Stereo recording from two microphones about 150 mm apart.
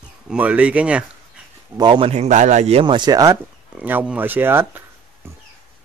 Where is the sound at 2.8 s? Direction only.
30° right (ahead or behind).